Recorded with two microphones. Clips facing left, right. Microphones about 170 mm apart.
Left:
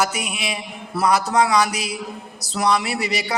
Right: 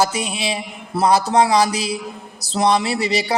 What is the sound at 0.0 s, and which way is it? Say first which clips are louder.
A man's voice: right 3 dB; 30° right (ahead or behind).